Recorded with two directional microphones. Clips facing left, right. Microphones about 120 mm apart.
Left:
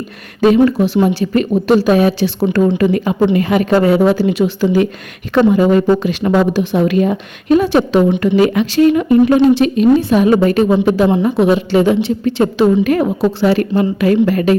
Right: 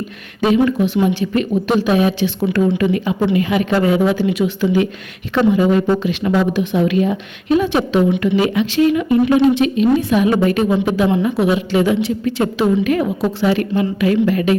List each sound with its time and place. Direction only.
0.4 s a woman's voice: 40° left (ahead or behind)
10.0 s a woman's voice: 30° left (ahead or behind)